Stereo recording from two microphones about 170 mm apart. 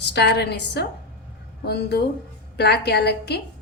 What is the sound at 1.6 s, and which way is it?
A woman's voice, 70° left (ahead or behind).